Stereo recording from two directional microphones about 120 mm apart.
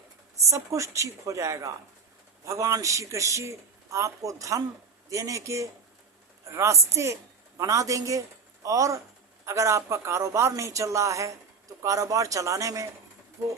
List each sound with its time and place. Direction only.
0.3 s a man's voice: 25° right (ahead or behind)